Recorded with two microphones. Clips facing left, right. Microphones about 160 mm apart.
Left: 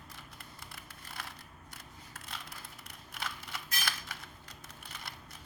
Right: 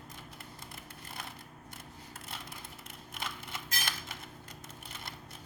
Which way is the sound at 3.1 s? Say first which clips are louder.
Even; 25° right (ahead or behind).